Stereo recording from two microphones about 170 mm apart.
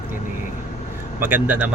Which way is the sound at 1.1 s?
10° right (ahead or behind).